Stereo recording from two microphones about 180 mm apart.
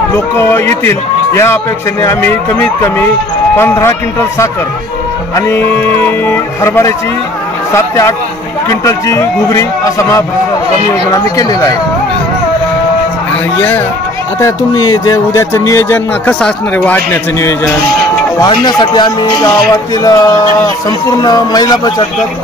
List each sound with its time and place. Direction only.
0.1 s speech: 15° left (ahead or behind)
13.6 s speech: 10° left (ahead or behind)
14.4 s speech: 20° left (ahead or behind)